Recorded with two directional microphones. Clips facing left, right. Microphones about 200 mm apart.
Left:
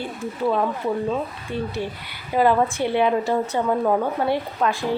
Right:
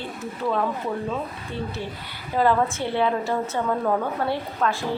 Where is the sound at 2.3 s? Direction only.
15° left (ahead or behind).